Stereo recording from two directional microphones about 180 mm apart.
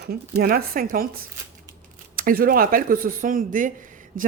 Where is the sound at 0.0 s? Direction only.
60° right (ahead or behind).